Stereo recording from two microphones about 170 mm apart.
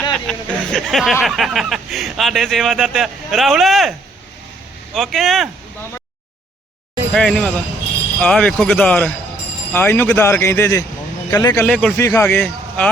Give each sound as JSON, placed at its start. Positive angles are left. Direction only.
{"t": 0.1, "sound": "speech", "side_deg": 5}
{"t": 4.9, "sound": "speech", "side_deg": 0}
{"t": 7.1, "sound": "speech", "side_deg": 5}
{"t": 11.6, "sound": "speech", "side_deg": 5}
{"t": 11.9, "sound": "speech", "side_deg": 15}